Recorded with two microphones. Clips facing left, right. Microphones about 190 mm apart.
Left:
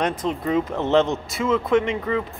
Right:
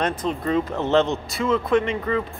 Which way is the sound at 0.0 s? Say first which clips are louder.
Even; 20° left (ahead or behind).